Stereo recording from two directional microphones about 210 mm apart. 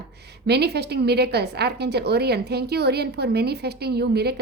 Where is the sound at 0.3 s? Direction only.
50° right (ahead or behind).